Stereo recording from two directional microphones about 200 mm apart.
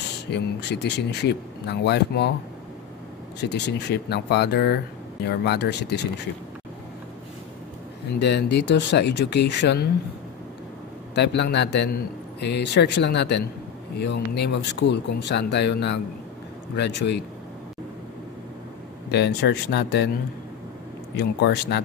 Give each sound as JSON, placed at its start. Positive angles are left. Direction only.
{"t": 0.3, "sound": "a man's voice", "side_deg": 60}
{"t": 3.3, "sound": "a man's voice", "side_deg": 60}
{"t": 8.2, "sound": "a man's voice", "side_deg": 60}
{"t": 11.1, "sound": "a man's voice", "side_deg": 60}
{"t": 19.0, "sound": "a man's voice", "side_deg": 60}
{"t": 21.2, "sound": "a man's voice", "side_deg": 55}